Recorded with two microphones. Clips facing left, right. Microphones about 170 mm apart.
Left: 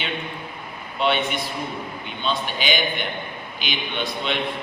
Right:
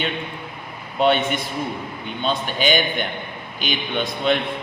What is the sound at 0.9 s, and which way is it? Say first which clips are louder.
Speech: right 4 dB; 45° right (ahead or behind).